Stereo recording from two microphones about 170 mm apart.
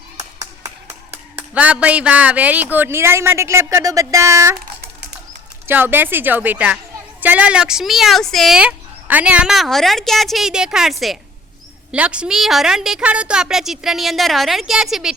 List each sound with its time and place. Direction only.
0.2 s clapping: 20° right (ahead or behind)
1.1 s speech: 10° right (ahead or behind)
5.6 s speech: 10° right (ahead or behind)